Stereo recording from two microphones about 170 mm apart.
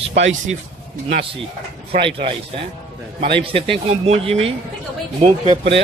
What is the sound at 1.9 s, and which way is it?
Speech, 35° right (ahead or behind).